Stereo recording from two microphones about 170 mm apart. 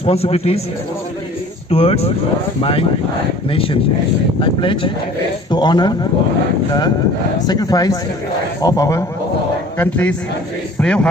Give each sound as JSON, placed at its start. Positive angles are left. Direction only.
{"t": 0.0, "sound": "speech", "side_deg": 35}
{"t": 1.7, "sound": "a man's voice", "side_deg": 35}
{"t": 7.4, "sound": "a man's voice", "side_deg": 20}